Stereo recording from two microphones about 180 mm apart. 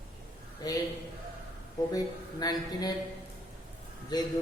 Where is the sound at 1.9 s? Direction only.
20° left (ahead or behind).